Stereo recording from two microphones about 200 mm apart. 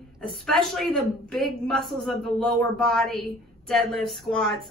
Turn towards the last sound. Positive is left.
turn(degrees=0)  # may be behind; listen again after turning